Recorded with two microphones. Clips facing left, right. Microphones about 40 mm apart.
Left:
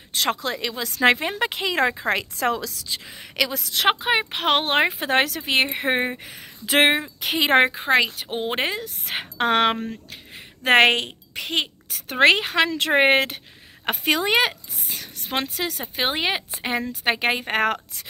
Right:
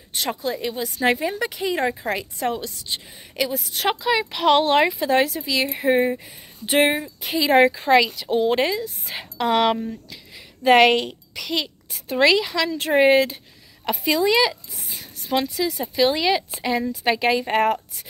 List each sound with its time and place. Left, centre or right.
0.1 s speech: left
1.1 s a woman's voice: left
4.0 s speech: left
6.2 s a woman's voice: left
8.8 s a woman's voice: left
11.9 s a woman's voice: left
15.8 s speech: left